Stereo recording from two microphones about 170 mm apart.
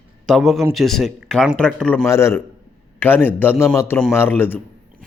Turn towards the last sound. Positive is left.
turn(degrees=10)  # may be behind; listen again after turning